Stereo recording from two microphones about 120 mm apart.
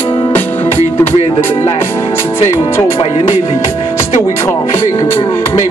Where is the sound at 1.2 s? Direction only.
75° left (ahead or behind).